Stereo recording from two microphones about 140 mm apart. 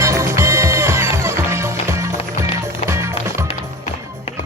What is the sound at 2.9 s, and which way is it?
Music, 20° right (ahead or behind).